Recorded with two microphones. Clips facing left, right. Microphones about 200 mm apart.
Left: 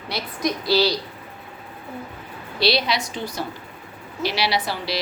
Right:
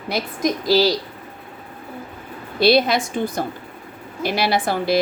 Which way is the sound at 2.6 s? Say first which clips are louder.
Right 6 dB; 50° right (ahead or behind).